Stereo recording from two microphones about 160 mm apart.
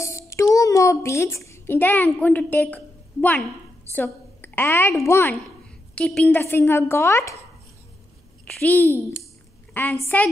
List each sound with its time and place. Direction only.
0.0 s a child's voice: 20° left (ahead or behind)
5.9 s a woman's voice: 5° left (ahead or behind)
8.5 s a woman's voice: 10° left (ahead or behind)